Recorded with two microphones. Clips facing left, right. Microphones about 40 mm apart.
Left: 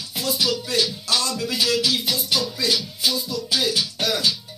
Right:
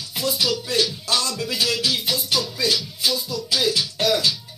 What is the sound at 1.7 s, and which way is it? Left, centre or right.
Speech, right.